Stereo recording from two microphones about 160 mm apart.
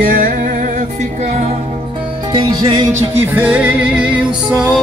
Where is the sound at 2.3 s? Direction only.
25° right (ahead or behind).